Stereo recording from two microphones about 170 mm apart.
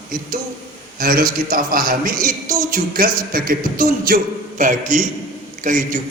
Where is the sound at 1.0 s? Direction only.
55° right (ahead or behind).